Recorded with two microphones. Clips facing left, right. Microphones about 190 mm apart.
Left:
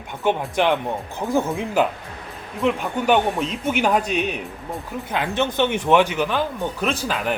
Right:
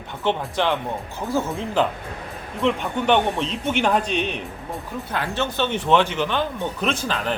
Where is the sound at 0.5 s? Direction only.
15° left (ahead or behind).